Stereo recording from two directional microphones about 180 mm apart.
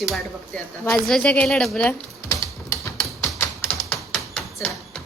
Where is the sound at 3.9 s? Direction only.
Centre (ahead or behind).